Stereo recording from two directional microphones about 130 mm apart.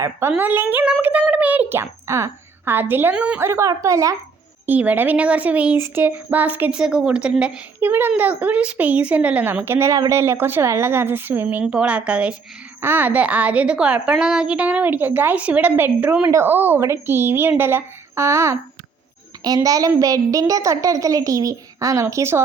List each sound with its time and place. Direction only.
0.0 s speech: 20° right (ahead or behind)
4.6 s a woman's voice: 15° right (ahead or behind)
19.6 s a woman's voice: 25° right (ahead or behind)